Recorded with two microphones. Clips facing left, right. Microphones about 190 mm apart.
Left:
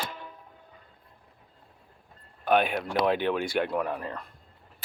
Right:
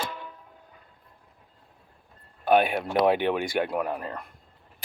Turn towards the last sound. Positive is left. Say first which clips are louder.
# right 1 dB
turn(degrees=-10)  # may be behind; listen again after turning